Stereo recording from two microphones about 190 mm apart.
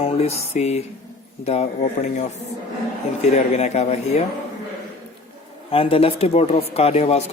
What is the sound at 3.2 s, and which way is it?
Speech, 35° left (ahead or behind).